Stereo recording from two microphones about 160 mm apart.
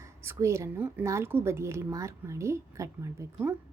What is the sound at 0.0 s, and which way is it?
A woman's voice, 15° right (ahead or behind).